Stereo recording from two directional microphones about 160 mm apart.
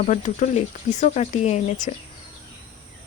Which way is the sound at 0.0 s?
50° left (ahead or behind).